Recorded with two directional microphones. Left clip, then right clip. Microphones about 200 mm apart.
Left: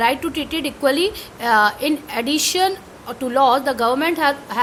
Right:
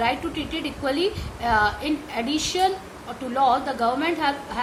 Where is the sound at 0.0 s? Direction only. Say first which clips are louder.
Left 5 dB; 55° left (ahead or behind).